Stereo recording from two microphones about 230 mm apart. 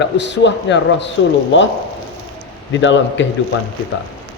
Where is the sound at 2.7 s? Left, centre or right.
Left.